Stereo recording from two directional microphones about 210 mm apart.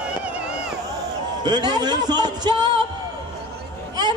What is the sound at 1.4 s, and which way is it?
Speech, 20° right (ahead or behind).